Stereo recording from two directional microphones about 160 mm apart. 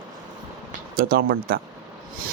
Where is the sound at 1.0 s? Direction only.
70° right (ahead or behind).